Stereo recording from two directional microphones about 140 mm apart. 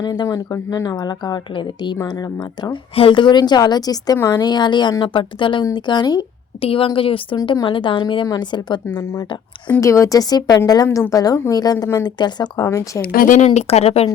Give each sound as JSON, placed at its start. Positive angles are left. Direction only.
{"t": 0.0, "sound": "a woman's voice", "side_deg": 25}
{"t": 6.6, "sound": "a woman's voice", "side_deg": 40}
{"t": 7.3, "sound": "a woman's voice", "side_deg": 30}
{"t": 9.8, "sound": "speech", "side_deg": 20}
{"t": 13.0, "sound": "speech", "side_deg": 80}